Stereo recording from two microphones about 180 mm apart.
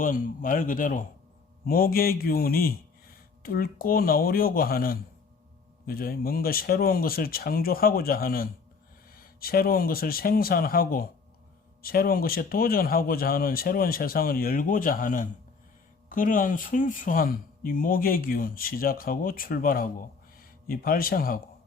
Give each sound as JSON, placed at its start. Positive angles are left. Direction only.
{"t": 0.0, "sound": "speech", "side_deg": 50}